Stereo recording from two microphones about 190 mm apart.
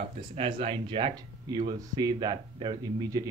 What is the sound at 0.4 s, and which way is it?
Speech, 30° right (ahead or behind).